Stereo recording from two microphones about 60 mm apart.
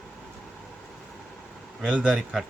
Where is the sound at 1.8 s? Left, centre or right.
Centre.